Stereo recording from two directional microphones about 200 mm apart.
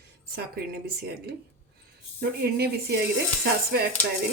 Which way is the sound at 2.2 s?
55° right (ahead or behind).